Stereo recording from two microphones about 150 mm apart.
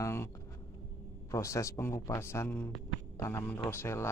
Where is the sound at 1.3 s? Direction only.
20° left (ahead or behind).